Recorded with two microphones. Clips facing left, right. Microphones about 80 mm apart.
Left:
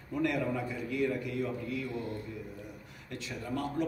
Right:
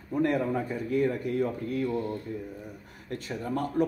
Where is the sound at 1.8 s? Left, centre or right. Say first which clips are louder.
Right 7 dB; right.